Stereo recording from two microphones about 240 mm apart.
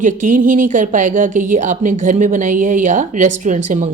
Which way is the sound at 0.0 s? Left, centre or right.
Right.